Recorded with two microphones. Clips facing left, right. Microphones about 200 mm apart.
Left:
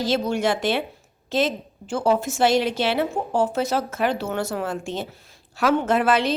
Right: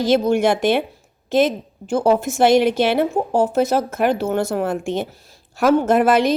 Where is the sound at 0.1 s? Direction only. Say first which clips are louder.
Right 7 dB; 55° right (ahead or behind).